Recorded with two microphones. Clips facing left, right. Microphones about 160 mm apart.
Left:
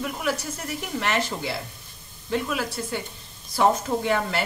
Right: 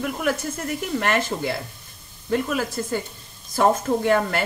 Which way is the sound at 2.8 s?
45° right (ahead or behind).